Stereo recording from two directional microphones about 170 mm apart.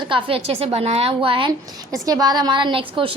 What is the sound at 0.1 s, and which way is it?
A woman's voice, 35° right (ahead or behind).